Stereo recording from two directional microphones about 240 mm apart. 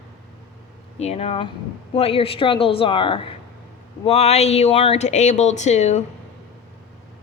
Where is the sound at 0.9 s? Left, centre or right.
Left.